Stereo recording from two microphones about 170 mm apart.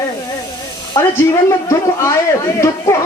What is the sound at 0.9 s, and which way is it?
A man's voice, 20° left (ahead or behind).